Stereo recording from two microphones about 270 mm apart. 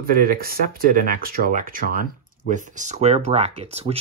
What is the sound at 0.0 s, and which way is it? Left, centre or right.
Speech, right.